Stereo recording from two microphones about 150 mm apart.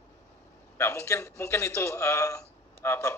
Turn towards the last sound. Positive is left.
turn(degrees=20)  # may be behind; listen again after turning